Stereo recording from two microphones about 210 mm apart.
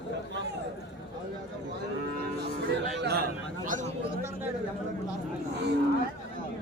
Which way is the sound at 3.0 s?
50° right (ahead or behind).